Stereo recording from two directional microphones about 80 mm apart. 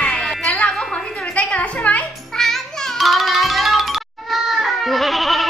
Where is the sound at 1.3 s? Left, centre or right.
Centre.